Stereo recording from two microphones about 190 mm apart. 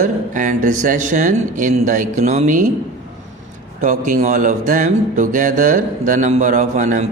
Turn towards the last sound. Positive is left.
turn(degrees=-40)  # may be behind; listen again after turning